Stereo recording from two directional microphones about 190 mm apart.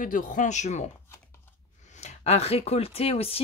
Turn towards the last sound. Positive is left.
turn(degrees=30)  # may be behind; listen again after turning